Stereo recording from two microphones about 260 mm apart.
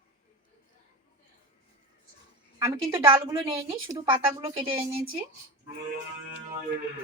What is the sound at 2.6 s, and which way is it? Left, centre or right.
A woman's voice, centre.